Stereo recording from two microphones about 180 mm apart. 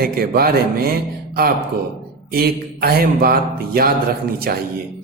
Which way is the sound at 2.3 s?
55° right (ahead or behind).